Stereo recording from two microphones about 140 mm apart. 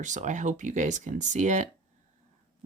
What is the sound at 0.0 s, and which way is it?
Speech, 60° right (ahead or behind).